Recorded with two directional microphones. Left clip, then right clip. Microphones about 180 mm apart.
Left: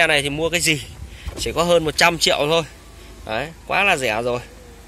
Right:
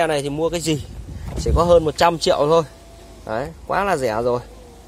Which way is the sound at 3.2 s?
10° right (ahead or behind).